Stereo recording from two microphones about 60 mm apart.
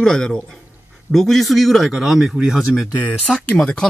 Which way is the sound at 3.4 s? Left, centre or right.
Centre.